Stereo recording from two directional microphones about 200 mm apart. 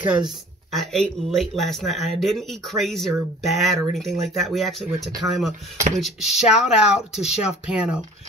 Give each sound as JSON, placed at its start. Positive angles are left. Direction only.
{"t": 0.0, "sound": "speech", "side_deg": -5}